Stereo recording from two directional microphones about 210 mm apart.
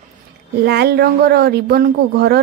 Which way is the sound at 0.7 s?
50° right (ahead or behind).